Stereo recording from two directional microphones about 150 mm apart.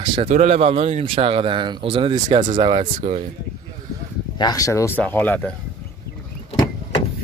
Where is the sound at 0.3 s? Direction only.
45° right (ahead or behind).